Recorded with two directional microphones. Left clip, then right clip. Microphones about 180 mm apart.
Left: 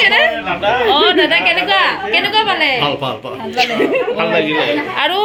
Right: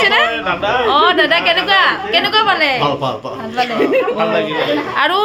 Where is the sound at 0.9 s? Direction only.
Centre (ahead or behind).